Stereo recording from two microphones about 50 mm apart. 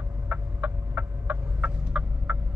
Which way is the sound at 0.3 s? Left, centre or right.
Right.